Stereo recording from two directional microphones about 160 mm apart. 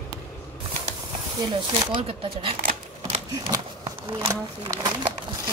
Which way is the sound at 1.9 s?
35° right (ahead or behind).